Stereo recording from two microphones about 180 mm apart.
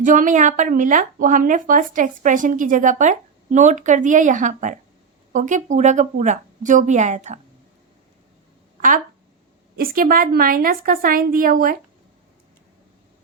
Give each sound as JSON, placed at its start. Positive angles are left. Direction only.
{"t": 0.0, "sound": "speech", "side_deg": -45}
{"t": 9.7, "sound": "speech", "side_deg": -55}